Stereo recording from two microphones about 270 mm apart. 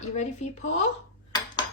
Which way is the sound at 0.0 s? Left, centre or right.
Left.